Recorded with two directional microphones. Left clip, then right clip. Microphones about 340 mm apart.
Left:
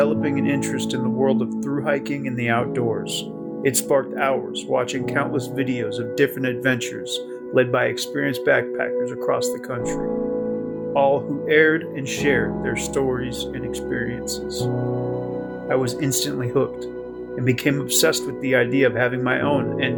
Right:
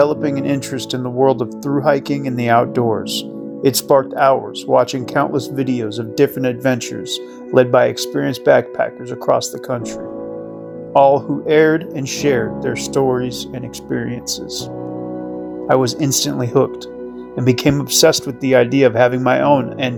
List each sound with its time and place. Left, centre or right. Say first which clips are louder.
0.3 s speech: right 3 dB; centre
10.9 s speech: right 8 dB; centre
15.7 s speech: right 7 dB; centre